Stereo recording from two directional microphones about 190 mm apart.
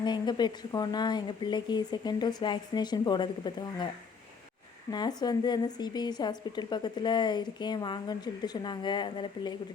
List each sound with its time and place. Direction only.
0.0 s a woman's voice: 25° left (ahead or behind)
4.9 s a woman's voice: 20° left (ahead or behind)